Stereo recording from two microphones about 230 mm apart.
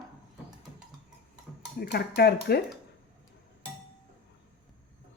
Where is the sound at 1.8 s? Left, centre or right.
Left.